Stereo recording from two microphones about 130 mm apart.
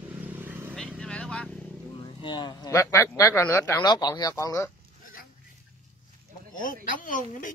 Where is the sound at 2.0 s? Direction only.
35° left (ahead or behind).